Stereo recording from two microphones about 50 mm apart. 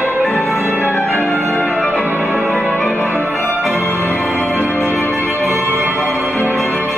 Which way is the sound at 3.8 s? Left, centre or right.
Left.